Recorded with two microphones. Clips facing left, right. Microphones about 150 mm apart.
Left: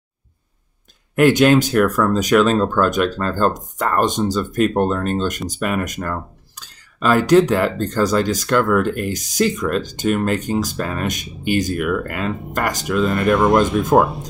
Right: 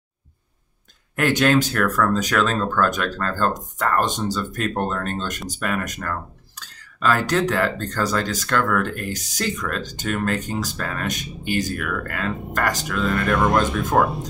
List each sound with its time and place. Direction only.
1.1 s speech: 15° left (ahead or behind)